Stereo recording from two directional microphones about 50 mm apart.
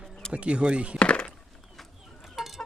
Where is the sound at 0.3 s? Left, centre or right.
Right.